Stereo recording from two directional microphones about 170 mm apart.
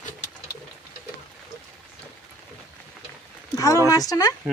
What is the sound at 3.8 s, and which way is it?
Speech, 20° left (ahead or behind).